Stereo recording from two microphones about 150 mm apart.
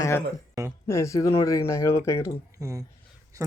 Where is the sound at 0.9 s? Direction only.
20° left (ahead or behind).